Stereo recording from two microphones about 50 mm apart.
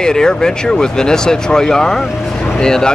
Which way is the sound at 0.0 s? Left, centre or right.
Centre.